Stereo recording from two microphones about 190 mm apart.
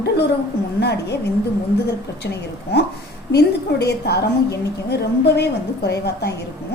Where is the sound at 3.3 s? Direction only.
60° left (ahead or behind).